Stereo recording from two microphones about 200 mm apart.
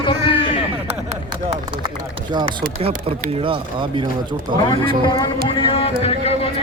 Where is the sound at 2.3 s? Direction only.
25° right (ahead or behind).